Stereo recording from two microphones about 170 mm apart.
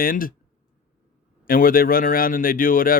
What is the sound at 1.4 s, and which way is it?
Speech, 55° left (ahead or behind).